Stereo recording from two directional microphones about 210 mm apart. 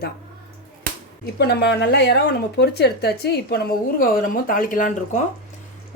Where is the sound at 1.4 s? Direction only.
50° left (ahead or behind).